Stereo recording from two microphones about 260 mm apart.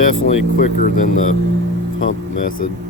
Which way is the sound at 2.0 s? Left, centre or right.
Left.